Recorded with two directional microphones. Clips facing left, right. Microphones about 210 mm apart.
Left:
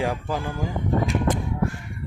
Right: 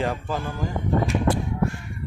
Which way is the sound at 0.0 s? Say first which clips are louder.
Even; 10° left (ahead or behind).